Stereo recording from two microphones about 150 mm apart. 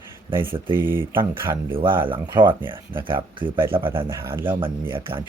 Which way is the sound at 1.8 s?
35° right (ahead or behind).